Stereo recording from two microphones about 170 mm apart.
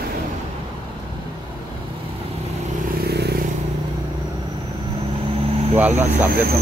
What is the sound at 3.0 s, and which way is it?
Vehicle, 70° right (ahead or behind).